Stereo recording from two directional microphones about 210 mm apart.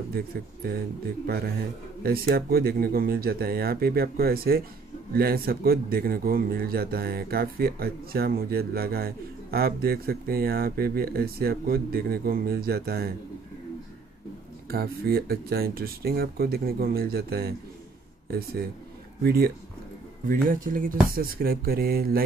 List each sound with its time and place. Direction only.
1.2 s a man's voice: 45° right (ahead or behind)
14.7 s a man's voice: 45° right (ahead or behind)